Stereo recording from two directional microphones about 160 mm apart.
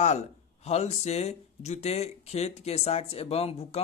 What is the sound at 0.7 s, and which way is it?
Speech, 45° left (ahead or behind).